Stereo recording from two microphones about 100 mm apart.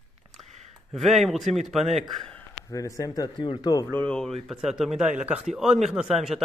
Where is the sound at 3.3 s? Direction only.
55° left (ahead or behind).